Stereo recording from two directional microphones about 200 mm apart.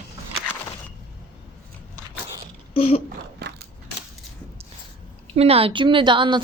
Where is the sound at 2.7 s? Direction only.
30° left (ahead or behind).